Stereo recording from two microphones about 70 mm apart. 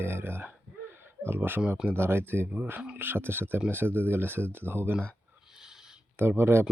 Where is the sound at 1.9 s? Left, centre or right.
Right.